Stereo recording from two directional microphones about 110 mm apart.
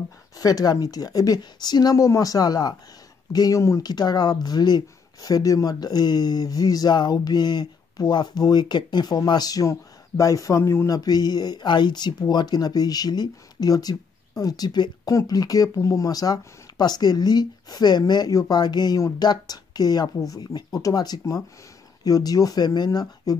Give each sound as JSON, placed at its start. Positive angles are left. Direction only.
{"t": 0.4, "sound": "speech", "side_deg": 35}
{"t": 11.0, "sound": "speech", "side_deg": 35}